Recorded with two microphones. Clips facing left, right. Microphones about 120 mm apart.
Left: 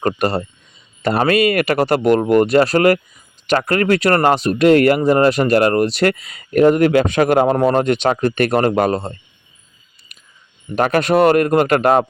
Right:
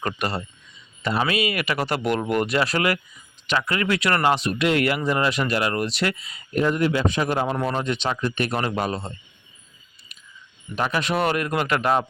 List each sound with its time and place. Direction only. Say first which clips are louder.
0.2 s speech: left 9 dB; 40° left (ahead or behind)
1.0 s speech: left 8 dB; 50° left (ahead or behind)
10.1 s whispering: left 2 dB; 50° left (ahead or behind)
10.8 s speech: left 9 dB; 60° left (ahead or behind)